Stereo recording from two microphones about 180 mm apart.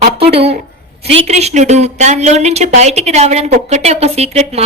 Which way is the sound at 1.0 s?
35° right (ahead or behind).